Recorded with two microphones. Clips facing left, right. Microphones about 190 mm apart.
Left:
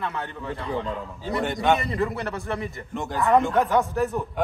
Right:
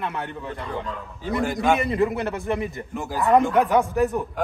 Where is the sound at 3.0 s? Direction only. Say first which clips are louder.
Right 1 dB; centre (ahead or behind).